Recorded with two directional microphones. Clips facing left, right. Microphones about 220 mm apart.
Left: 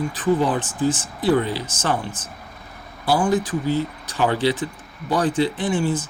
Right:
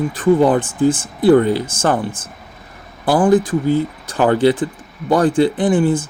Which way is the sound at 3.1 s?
50° right (ahead or behind).